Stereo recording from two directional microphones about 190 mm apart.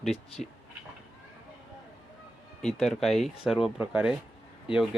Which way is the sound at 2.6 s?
5° left (ahead or behind).